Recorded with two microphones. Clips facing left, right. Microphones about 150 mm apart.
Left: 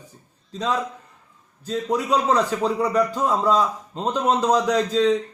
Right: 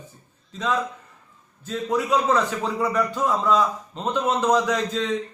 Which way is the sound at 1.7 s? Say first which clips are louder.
Left 1 dB; 35° left (ahead or behind).